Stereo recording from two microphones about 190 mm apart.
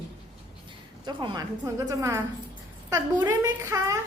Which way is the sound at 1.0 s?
25° right (ahead or behind).